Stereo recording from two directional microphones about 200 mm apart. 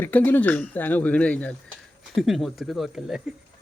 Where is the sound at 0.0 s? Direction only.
10° left (ahead or behind).